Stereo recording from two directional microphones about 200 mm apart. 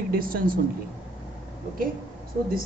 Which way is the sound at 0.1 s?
45° right (ahead or behind).